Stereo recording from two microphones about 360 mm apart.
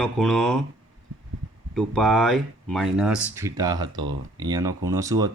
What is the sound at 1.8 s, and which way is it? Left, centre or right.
Speech, centre.